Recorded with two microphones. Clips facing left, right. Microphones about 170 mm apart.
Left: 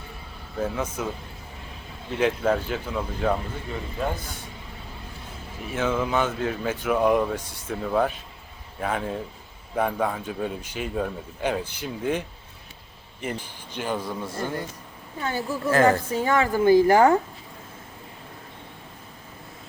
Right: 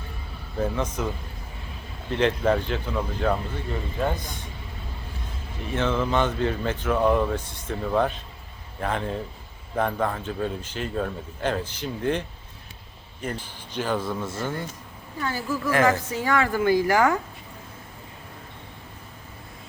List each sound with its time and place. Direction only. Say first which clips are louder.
0.6 s speech: right 1 dB; 5° left (ahead or behind)
2.1 s speech: right 1 dB; 5° left (ahead or behind)
5.7 s speech: right 1 dB; 10° left (ahead or behind)
13.2 s speech: even; 10° left (ahead or behind)
15.2 s a woman's voice: even; 25° left (ahead or behind)